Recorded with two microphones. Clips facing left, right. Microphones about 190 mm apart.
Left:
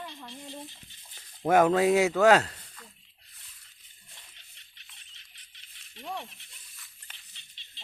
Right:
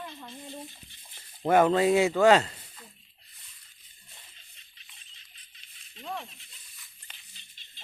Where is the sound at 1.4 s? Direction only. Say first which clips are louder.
Even; 5° left (ahead or behind).